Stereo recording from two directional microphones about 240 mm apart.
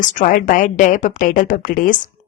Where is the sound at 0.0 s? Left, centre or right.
Left.